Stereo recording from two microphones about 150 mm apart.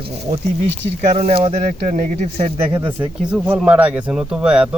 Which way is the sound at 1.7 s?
55° right (ahead or behind).